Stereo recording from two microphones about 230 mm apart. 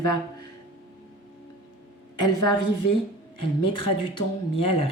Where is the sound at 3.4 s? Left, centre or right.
Left.